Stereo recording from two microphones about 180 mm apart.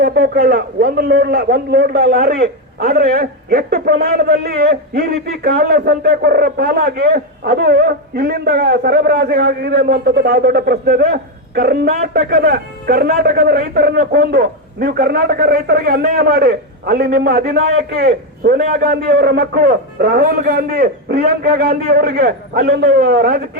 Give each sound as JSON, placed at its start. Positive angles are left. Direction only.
{"t": 0.0, "sound": "a man's voice", "side_deg": -60}